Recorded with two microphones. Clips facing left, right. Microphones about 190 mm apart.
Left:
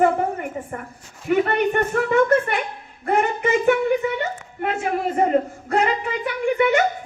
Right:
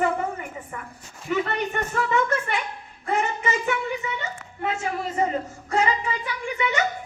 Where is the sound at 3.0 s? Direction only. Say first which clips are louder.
Left 5 dB; 60° left (ahead or behind).